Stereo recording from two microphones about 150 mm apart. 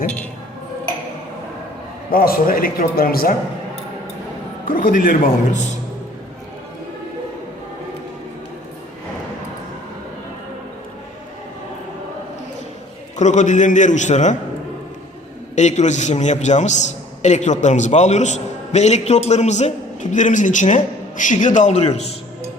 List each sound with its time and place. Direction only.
2.0 s a man's voice: 75° left (ahead or behind)
4.6 s a man's voice: 70° left (ahead or behind)
13.1 s a man's voice: 50° left (ahead or behind)
15.5 s a man's voice: 50° left (ahead or behind)